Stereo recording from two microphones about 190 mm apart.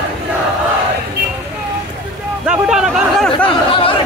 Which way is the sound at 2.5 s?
5° right (ahead or behind).